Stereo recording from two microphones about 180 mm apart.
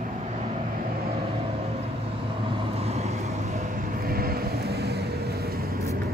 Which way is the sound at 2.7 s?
35° right (ahead or behind).